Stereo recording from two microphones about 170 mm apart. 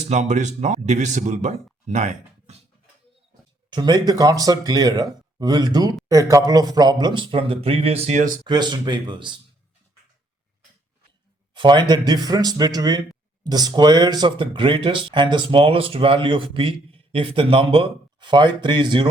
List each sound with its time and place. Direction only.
0.0 s speech: 45° right (ahead or behind)
3.7 s speech: 25° right (ahead or behind); by 8.3 s 40° right (ahead or behind)
8.4 s speech: 25° right (ahead or behind)
11.5 s speech: 25° right (ahead or behind)